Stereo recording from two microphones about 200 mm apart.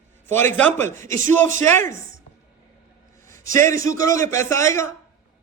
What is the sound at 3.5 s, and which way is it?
Speech, 15° left (ahead or behind).